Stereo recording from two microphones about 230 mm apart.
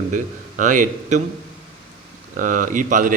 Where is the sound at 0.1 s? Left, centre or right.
Right.